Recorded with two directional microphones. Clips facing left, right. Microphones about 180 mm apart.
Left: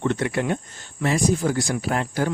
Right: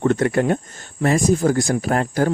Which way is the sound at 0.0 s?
45° right (ahead or behind).